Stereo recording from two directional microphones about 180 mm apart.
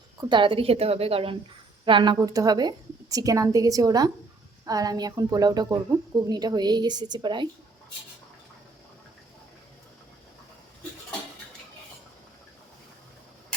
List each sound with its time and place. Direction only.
0.2 s a woman's voice: 25° right (ahead or behind)